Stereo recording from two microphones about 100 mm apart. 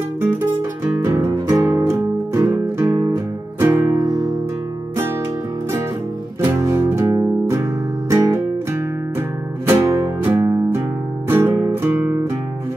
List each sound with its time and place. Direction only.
1.5 s music: 30° right (ahead or behind)
6.6 s music: 35° right (ahead or behind)
9.7 s music: 30° right (ahead or behind)